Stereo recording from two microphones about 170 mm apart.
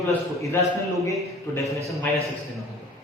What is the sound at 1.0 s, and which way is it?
Speech, 20° left (ahead or behind).